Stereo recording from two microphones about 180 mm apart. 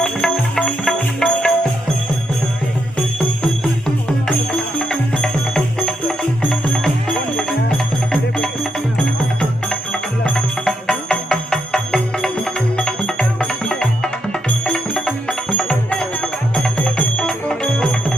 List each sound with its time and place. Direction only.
0.0 s music: 5° left (ahead or behind)
4.8 s music: 5° left (ahead or behind)
9.4 s music: 5° left (ahead or behind)